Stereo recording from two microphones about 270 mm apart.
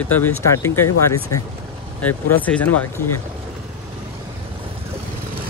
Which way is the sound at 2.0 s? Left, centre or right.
Centre.